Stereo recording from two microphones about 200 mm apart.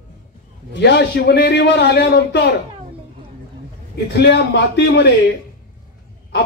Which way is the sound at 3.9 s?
55° left (ahead or behind).